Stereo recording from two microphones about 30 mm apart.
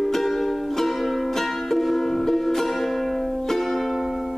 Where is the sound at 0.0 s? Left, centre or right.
Centre.